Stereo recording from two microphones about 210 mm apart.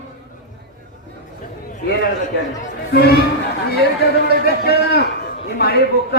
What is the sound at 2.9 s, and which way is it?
Speech, 50° left (ahead or behind).